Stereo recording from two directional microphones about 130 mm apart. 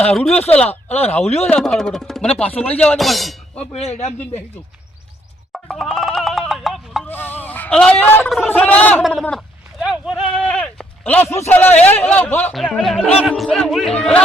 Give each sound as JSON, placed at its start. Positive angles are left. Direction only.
{"t": 0.0, "sound": "speech", "side_deg": 10}
{"t": 0.9, "sound": "speech", "side_deg": 55}
{"t": 1.5, "sound": "speech", "side_deg": 5}
{"t": 3.7, "sound": "speech", "side_deg": 55}
{"t": 5.5, "sound": "music", "side_deg": 0}
{"t": 7.1, "sound": "a sound", "side_deg": 15}
{"t": 8.4, "sound": "speech", "side_deg": 10}
{"t": 9.8, "sound": "a sound", "side_deg": -5}
{"t": 12.6, "sound": "speech", "side_deg": 0}